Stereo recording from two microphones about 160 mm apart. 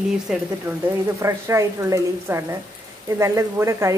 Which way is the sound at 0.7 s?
20° right (ahead or behind).